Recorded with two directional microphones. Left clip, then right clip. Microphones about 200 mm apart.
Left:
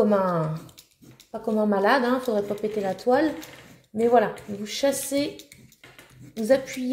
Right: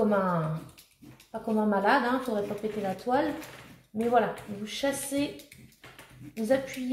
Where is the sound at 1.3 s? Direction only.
50° left (ahead or behind).